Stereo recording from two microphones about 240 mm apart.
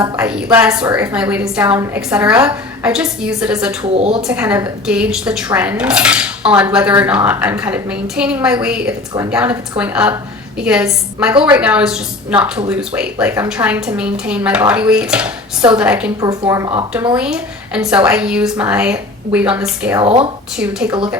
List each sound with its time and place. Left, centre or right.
0.2 s speech: centre
3.9 s speech: right
4.2 s speech: centre
20.0 s speech: right
20.6 s speech: centre